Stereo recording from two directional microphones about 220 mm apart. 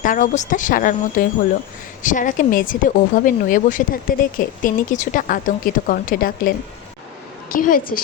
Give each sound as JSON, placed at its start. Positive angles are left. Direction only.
{"t": 0.0, "sound": "speech", "side_deg": 35}
{"t": 7.5, "sound": "speech", "side_deg": 40}